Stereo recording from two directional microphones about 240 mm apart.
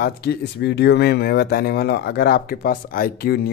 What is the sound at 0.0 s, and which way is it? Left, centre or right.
Speech, left.